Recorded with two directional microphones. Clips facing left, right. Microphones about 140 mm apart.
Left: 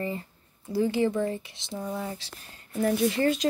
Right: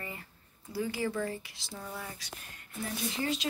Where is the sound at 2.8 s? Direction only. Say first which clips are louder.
Left 11 dB; 55° left (ahead or behind).